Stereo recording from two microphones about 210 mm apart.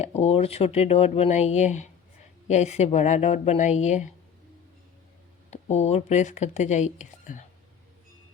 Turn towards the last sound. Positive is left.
turn(degrees=35)  # may be behind; listen again after turning